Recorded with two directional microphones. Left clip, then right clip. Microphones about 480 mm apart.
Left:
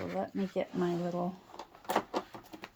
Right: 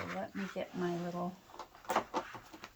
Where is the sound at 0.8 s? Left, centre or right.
Centre.